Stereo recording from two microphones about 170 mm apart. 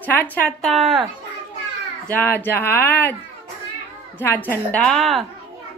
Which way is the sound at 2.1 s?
10° left (ahead or behind).